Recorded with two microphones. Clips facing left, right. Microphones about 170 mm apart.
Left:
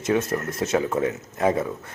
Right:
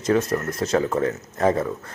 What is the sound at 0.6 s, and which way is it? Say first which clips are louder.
Speech: right 1 dB; 5° left (ahead or behind).